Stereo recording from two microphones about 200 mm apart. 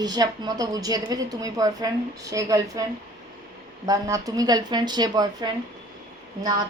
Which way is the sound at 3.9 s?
15° right (ahead or behind).